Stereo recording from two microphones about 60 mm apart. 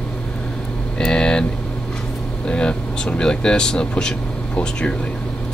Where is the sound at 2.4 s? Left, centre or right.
Centre.